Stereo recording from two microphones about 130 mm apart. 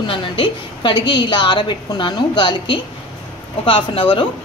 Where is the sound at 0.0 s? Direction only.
40° left (ahead or behind).